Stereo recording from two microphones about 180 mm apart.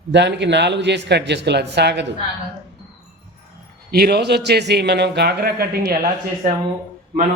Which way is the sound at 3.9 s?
60° right (ahead or behind).